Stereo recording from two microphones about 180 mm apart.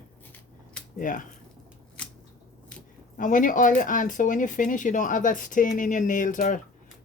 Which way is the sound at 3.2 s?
45° left (ahead or behind).